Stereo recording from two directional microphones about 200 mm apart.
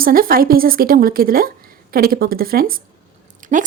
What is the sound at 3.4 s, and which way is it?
Dog, 40° right (ahead or behind).